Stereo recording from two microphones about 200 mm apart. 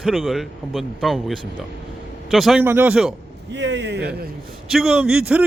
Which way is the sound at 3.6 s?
60° right (ahead or behind).